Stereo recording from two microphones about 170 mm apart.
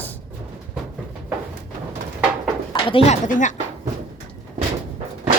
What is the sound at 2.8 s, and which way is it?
Speech, 35° left (ahead or behind).